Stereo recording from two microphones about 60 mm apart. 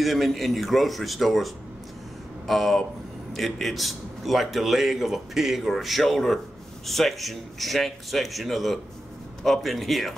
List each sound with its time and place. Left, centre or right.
0.0 s a man's voice: centre
2.4 s a sound: centre
3.3 s a man's voice: centre